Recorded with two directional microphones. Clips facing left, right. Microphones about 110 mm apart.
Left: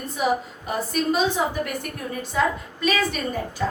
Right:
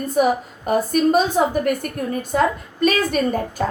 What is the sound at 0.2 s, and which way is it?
A woman's voice, 50° right (ahead or behind).